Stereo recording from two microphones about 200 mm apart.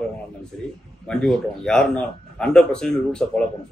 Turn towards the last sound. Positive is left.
turn(degrees=5)  # may be behind; listen again after turning